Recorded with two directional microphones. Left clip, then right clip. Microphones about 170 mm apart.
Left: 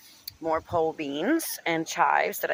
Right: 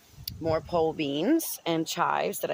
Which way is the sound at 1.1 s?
25° right (ahead or behind).